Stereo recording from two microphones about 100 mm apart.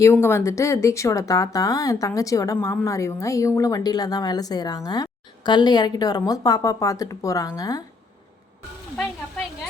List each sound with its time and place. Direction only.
0.0 s a woman's voice: 25° left (ahead or behind)